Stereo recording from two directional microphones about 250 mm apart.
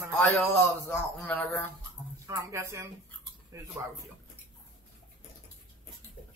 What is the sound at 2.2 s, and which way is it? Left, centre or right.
Speech, centre.